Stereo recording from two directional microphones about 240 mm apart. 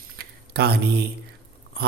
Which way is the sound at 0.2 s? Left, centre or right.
Right.